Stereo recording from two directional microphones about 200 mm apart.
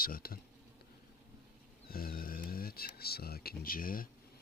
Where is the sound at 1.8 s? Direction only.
45° left (ahead or behind).